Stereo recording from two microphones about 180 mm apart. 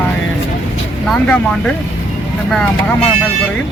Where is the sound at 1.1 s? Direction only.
5° left (ahead or behind).